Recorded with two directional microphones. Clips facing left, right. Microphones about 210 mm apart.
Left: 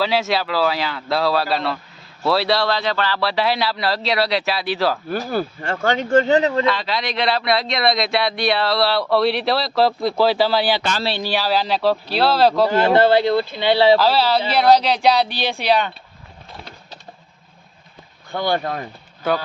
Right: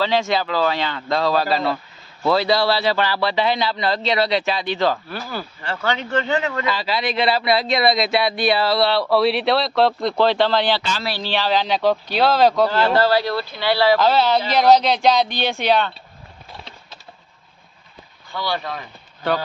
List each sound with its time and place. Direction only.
0.0 s speech: 5° left (ahead or behind); by 3.2 s 10° right (ahead or behind)
3.2 s speech: centre (ahead or behind)
5.0 s speech: 45° left (ahead or behind)
6.7 s speech: 5° right (ahead or behind)
12.9 s speech: 20° left (ahead or behind)
14.0 s speech: 5° left (ahead or behind)
18.3 s speech: 50° left (ahead or behind)